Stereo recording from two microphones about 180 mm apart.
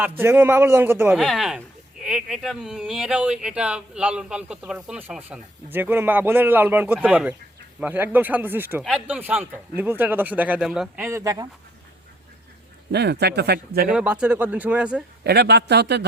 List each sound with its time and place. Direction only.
0.2 s speech: 10° right (ahead or behind)
12.9 s speech: 70° right (ahead or behind)
13.8 s speech: 5° right (ahead or behind)
15.2 s speech: 65° right (ahead or behind)